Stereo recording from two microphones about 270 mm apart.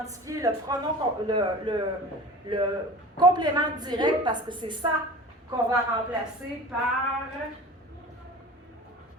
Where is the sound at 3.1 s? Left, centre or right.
Centre.